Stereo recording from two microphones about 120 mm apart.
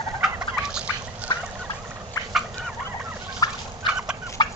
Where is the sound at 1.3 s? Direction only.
35° left (ahead or behind).